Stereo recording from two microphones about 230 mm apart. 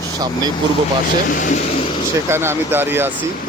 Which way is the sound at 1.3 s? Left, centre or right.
Left.